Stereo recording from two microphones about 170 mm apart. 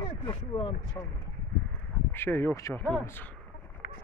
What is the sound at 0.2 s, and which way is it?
Speech, 25° left (ahead or behind).